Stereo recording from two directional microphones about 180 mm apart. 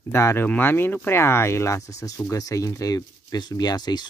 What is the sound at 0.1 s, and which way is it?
Speech, 15° left (ahead or behind).